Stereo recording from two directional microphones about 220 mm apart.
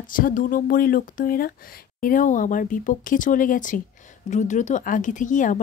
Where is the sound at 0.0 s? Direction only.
40° left (ahead or behind).